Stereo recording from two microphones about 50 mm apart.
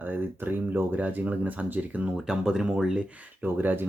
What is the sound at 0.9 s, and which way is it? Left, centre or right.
Speech, right.